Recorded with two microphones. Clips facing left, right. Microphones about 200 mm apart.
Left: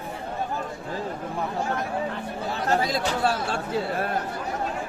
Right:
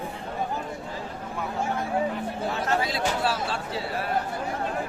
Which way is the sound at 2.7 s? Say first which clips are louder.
Left 4 dB; 40° left (ahead or behind).